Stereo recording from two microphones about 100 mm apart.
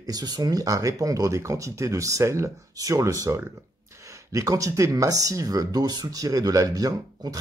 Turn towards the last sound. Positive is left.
turn(degrees=-40)  # may be behind; listen again after turning